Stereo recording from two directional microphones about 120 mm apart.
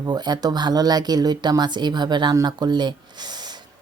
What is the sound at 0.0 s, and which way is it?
A woman's voice, 35° right (ahead or behind).